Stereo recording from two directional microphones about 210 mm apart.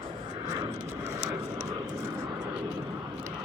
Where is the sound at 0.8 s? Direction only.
10° right (ahead or behind).